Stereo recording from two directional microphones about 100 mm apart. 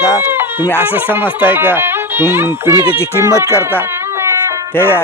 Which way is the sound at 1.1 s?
20° right (ahead or behind).